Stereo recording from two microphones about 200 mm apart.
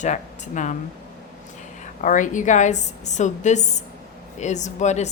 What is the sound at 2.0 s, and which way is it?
A woman's voice, 40° left (ahead or behind).